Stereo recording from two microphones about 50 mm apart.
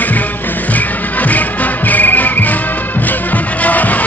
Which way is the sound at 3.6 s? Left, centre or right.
Left.